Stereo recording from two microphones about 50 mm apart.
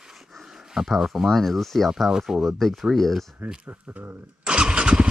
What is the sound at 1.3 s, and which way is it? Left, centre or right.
Speech, centre.